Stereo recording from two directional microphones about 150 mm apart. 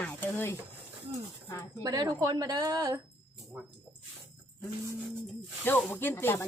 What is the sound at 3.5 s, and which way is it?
Speech, 10° right (ahead or behind).